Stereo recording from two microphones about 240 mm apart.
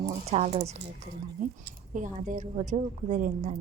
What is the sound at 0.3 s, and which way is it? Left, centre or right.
A woman's voice, right.